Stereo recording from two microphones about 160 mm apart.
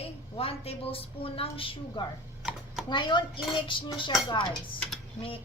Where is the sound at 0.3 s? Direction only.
35° left (ahead or behind).